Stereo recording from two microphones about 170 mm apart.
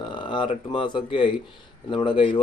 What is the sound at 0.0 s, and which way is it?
Speech, 30° left (ahead or behind).